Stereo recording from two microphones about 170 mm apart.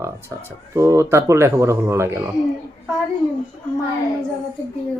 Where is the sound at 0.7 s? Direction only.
20° right (ahead or behind).